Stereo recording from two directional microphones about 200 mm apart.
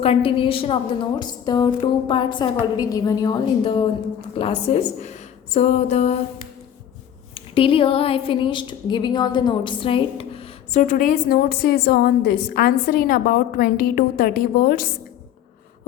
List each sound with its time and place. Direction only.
0.0 s a woman's voice: 25° left (ahead or behind)
7.3 s a woman's voice: 25° left (ahead or behind); by 14.8 s 45° left (ahead or behind)